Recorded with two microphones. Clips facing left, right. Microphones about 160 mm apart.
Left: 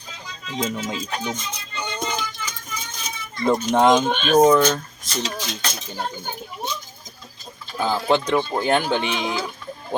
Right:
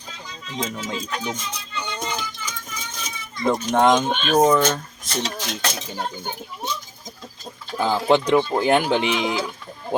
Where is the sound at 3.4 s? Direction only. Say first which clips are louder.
Left 1 dB; 5° left (ahead or behind).